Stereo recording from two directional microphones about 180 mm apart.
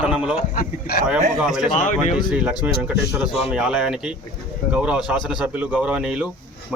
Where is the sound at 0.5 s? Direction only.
55° left (ahead or behind).